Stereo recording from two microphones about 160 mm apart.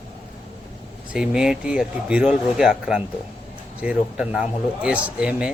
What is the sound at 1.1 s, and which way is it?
A man's voice, 5° right (ahead or behind).